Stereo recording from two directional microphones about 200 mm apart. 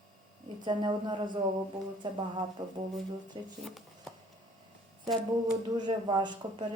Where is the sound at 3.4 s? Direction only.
20° right (ahead or behind).